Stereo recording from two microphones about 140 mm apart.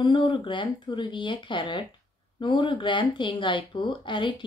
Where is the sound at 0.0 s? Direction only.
35° left (ahead or behind).